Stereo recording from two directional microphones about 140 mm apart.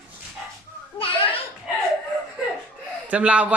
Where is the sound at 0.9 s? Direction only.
40° left (ahead or behind).